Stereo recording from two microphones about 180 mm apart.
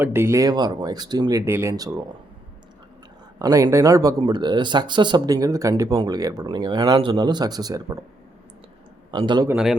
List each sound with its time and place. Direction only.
0.0 s speech: 15° right (ahead or behind)
3.3 s speech: 20° right (ahead or behind)
9.1 s speech: 25° right (ahead or behind)